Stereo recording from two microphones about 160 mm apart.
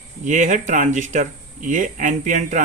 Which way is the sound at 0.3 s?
50° right (ahead or behind).